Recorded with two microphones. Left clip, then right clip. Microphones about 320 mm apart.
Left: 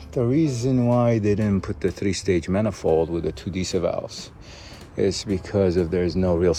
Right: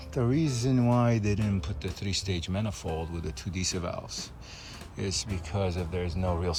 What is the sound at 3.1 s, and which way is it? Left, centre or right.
Speech, centre.